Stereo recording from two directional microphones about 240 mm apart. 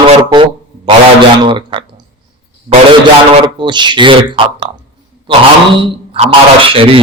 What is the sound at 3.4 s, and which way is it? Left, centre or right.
Speech, centre.